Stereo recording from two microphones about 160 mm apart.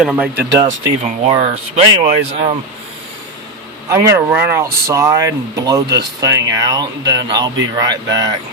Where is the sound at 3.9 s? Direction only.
15° right (ahead or behind).